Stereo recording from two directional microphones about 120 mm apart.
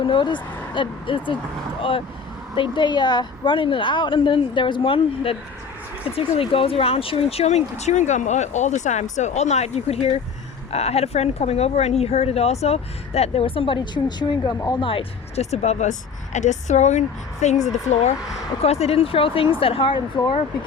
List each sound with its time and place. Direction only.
0.0 s a woman's voice: 40° left (ahead or behind)
2.6 s a woman's voice: 40° left (ahead or behind)
15.4 s speech: 65° left (ahead or behind)
18.6 s a woman's voice: 60° left (ahead or behind)